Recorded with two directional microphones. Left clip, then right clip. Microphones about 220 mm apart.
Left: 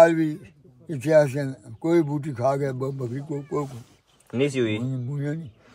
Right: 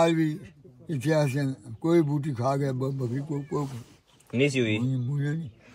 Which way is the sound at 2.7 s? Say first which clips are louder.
Left 2 dB; 50° left (ahead or behind).